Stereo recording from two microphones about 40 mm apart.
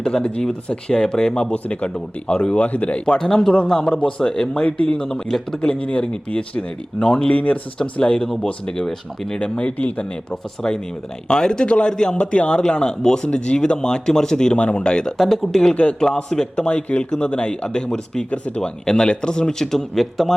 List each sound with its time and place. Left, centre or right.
0.0 s a man's voice: left
3.1 s a man's voice: centre
5.0 s speech: centre
5.6 s a man's voice: left
7.3 s speech: left
7.8 s a man's voice: left
8.9 s speech: centre
9.4 s a man's voice: left
10.6 s a man's voice: centre
15.2 s speech: centre
15.7 s a man's voice: left
16.6 s a man's voice: left
18.3 s speech: left
18.6 s speech: left